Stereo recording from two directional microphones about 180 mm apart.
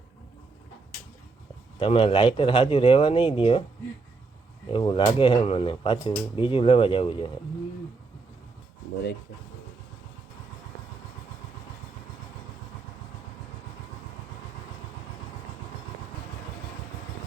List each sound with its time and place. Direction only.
1.8 s speech: 30° left (ahead or behind)
4.7 s speech: 30° left (ahead or behind)